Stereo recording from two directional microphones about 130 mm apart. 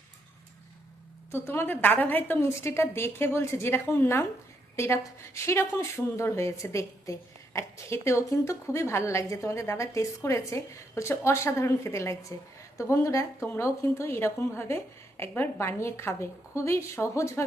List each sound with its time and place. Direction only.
1.3 s speech: 20° left (ahead or behind)